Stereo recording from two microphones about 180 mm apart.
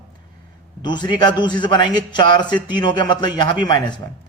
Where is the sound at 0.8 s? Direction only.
25° left (ahead or behind).